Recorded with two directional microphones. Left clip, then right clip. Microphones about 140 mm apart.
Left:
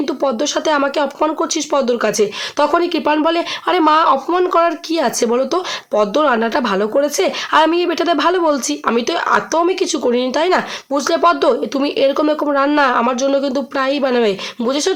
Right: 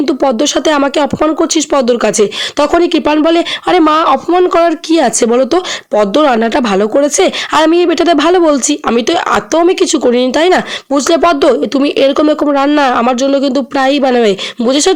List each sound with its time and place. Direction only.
0.0 s a woman's voice: 50° right (ahead or behind)